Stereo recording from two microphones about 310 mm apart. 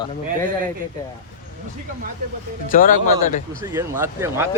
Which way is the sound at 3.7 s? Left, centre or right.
Centre.